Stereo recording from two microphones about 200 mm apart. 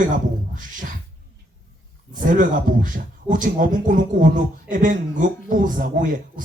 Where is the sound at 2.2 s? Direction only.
40° right (ahead or behind).